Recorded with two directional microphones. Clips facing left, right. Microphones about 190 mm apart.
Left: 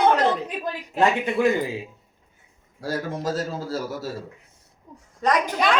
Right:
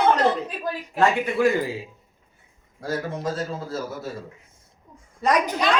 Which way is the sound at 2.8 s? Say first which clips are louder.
Even; 35° left (ahead or behind).